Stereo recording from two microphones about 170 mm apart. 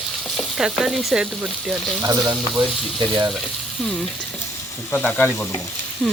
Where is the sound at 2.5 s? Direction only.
Centre (ahead or behind).